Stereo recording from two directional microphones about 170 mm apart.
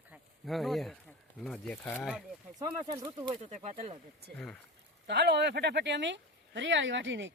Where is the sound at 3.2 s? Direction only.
40° right (ahead or behind).